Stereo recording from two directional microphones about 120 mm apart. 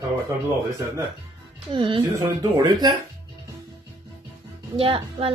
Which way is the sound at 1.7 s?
45° right (ahead or behind).